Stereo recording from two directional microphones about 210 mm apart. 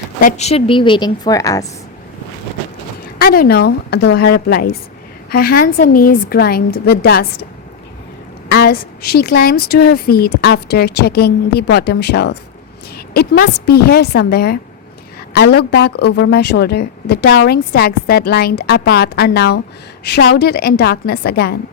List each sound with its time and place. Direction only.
0.2 s a woman's voice: 35° left (ahead or behind); by 1.6 s 15° left (ahead or behind)
3.2 s a woman's voice: 45° left (ahead or behind)
8.4 s a woman's voice: 50° left (ahead or behind)